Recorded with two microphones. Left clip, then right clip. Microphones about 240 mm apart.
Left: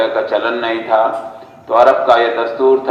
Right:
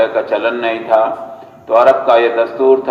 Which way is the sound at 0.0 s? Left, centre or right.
Right.